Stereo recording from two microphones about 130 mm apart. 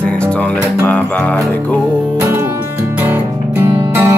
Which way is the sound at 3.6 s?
20° right (ahead or behind).